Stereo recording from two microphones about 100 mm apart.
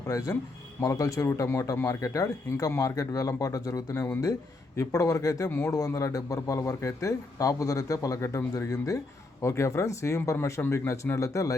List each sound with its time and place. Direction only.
0.1 s a man's voice: 35° left (ahead or behind)
3.9 s speech: 20° left (ahead or behind)
4.8 s a man's voice: 35° left (ahead or behind)
5.5 s speech: 20° left (ahead or behind)
5.7 s a man's voice: 35° left (ahead or behind)